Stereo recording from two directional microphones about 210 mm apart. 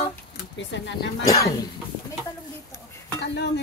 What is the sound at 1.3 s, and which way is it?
Speech, 15° left (ahead or behind).